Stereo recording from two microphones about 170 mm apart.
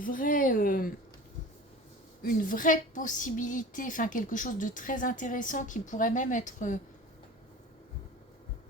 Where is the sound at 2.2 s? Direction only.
50° left (ahead or behind).